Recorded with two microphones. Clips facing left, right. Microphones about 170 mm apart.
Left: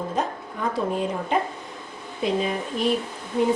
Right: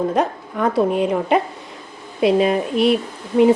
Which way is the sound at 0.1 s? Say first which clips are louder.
Right 7 dB; 70° right (ahead or behind).